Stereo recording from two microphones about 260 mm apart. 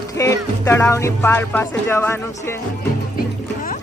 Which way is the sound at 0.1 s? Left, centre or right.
Centre.